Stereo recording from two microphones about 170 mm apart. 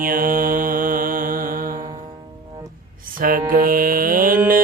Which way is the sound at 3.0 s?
55° right (ahead or behind).